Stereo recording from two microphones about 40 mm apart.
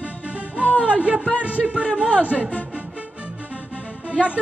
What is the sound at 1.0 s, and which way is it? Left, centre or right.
Speech, right.